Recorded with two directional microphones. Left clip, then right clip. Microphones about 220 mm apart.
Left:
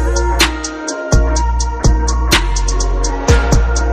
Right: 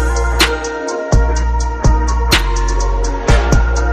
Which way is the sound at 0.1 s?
Centre (ahead or behind).